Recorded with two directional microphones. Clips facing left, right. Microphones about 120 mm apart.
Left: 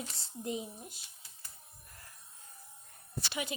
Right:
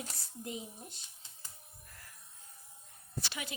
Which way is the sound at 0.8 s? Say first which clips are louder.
Left 1 dB; 5° left (ahead or behind).